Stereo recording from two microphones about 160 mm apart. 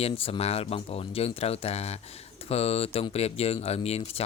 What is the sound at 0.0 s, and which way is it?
Speech, 35° left (ahead or behind).